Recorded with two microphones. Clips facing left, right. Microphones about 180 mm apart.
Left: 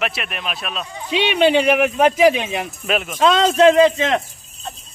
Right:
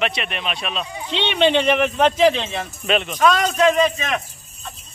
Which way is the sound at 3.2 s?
25° left (ahead or behind).